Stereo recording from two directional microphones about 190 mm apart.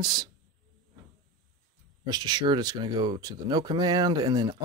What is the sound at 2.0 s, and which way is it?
Speech, 20° right (ahead or behind).